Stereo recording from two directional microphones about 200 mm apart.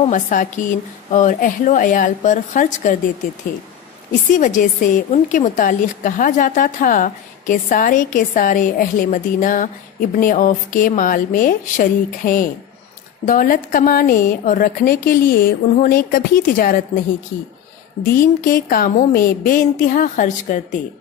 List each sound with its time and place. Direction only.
0.1 s a woman's voice: 40° left (ahead or behind)
4.1 s a woman's voice: 40° left (ahead or behind)
18.2 s a woman's voice: 45° left (ahead or behind)